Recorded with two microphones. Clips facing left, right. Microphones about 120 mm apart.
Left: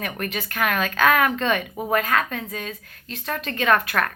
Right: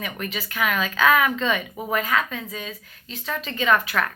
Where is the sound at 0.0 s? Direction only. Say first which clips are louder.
Left 2 dB; 55° left (ahead or behind).